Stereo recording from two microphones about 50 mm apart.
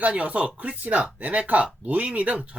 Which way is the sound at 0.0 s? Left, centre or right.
Right.